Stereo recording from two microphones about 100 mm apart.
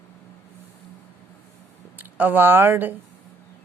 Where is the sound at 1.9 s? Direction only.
20° right (ahead or behind).